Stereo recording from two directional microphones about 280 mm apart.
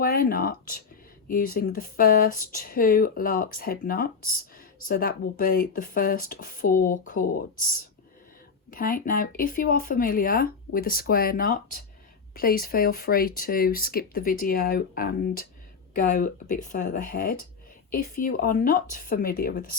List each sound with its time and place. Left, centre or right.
0.0 s speech: left
8.7 s speech: left